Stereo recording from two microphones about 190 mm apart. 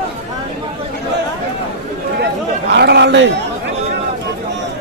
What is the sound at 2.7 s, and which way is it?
Speech, 60° right (ahead or behind).